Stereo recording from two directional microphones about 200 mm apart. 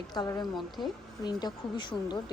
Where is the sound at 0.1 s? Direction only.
20° left (ahead or behind).